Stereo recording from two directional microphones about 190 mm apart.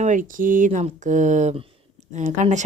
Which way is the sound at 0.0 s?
40° right (ahead or behind).